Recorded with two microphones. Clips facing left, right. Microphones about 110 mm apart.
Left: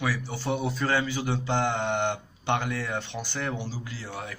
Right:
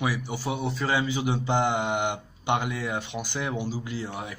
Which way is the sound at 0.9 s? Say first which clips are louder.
Right 3 dB; 15° right (ahead or behind).